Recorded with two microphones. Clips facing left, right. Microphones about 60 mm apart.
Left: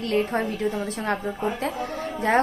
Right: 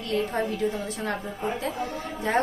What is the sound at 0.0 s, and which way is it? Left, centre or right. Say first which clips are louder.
A woman's voice: left 3 dB; left.